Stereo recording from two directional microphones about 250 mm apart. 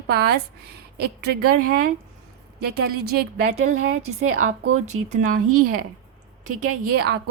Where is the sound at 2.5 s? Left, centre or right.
Right.